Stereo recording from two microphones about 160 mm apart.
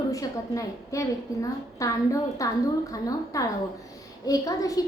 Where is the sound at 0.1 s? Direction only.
20° left (ahead or behind).